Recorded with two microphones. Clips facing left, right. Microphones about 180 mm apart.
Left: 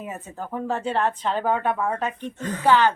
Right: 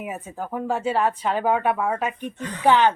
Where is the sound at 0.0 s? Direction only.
10° right (ahead or behind).